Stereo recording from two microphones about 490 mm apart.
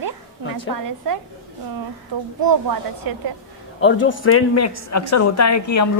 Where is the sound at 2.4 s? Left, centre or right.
Right.